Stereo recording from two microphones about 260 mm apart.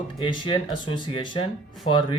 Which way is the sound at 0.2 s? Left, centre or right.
Centre.